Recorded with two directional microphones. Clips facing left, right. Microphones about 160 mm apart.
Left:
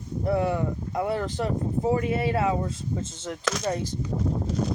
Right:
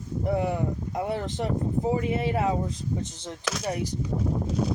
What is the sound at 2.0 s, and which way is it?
Speech, 20° right (ahead or behind).